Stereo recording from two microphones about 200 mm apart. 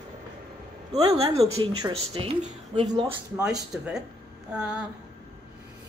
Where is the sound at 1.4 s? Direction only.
15° right (ahead or behind).